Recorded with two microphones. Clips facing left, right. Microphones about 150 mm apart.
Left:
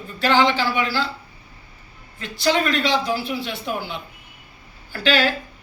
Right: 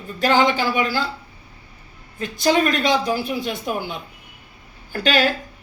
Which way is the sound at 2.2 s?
45° right (ahead or behind).